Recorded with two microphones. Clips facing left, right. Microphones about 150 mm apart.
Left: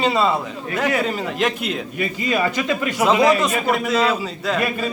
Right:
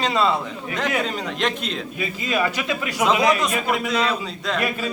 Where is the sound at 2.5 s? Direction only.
5° right (ahead or behind).